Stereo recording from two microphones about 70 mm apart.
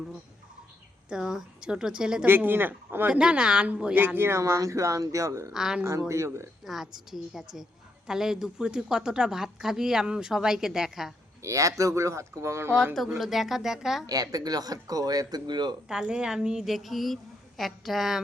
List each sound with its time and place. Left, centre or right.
1.1 s speech: centre
2.2 s speech: right
3.1 s speech: centre
3.9 s speech: right
5.5 s speech: centre
6.0 s speech: right
6.7 s speech: centre
11.4 s speech: right
12.8 s speech: centre
14.1 s speech: right
15.9 s speech: centre